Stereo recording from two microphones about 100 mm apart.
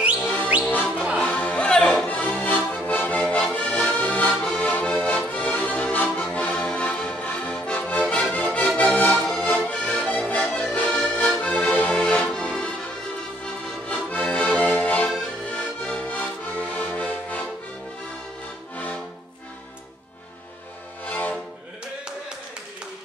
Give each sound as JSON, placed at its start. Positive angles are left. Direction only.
{"t": 0.2, "sound": "whistle", "side_deg": 15}
{"t": 0.7, "sound": "music", "side_deg": 15}
{"t": 2.0, "sound": "accordion", "side_deg": 15}
{"t": 13.8, "sound": "music", "side_deg": 15}
{"t": 15.5, "sound": "accordion", "side_deg": 15}
{"t": 21.0, "sound": "music", "side_deg": 15}